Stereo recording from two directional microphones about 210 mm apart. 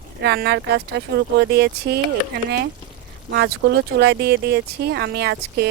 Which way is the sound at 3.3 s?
50° right (ahead or behind).